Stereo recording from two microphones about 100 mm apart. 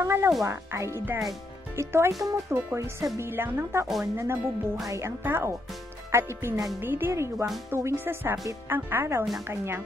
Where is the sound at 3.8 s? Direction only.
Centre (ahead or behind).